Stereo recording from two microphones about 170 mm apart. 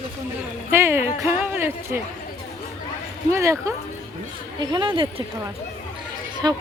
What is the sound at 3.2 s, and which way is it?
Speech, 15° right (ahead or behind).